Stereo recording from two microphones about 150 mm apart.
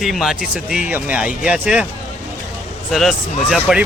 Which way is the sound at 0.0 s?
Centre (ahead or behind).